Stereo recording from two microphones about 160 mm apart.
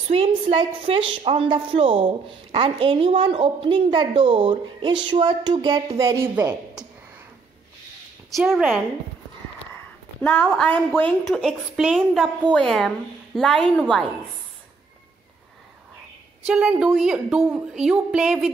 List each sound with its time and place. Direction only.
0.1 s a woman's voice: 35° right (ahead or behind); by 6.9 s 10° right (ahead or behind)
8.4 s a woman's voice: centre (ahead or behind)
10.2 s a woman's voice: 10° left (ahead or behind)
11.2 s a woman's voice: centre (ahead or behind)
16.4 s a woman's voice: 5° right (ahead or behind)